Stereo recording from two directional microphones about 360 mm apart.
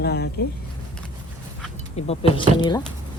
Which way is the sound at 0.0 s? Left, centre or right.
Left.